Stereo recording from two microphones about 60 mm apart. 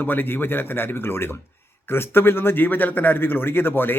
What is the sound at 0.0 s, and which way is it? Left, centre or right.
A man's voice, left.